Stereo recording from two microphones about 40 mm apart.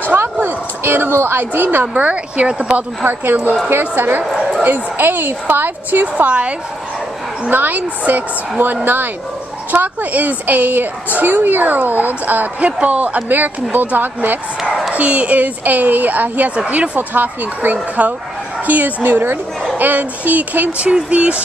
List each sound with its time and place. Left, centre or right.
0.4 s a sound: right
1.5 s speech: right
2.0 s speech: right
3.1 s a woman's voice: right
7.4 s a woman's voice: right
12.8 s speech: right
13.3 s a woman's voice: right
14.9 s a woman's voice: right
16.5 s speech: right
17.1 s a woman's voice: right
19.0 s speech: right
19.8 s a woman's voice: right
20.8 s speech: right